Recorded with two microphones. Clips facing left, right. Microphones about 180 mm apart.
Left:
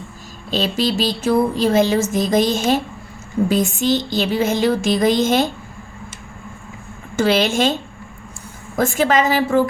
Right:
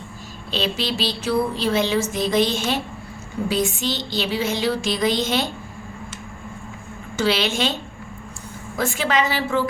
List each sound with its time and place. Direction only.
0.5 s speech: 45° left (ahead or behind)
7.2 s speech: 50° left (ahead or behind)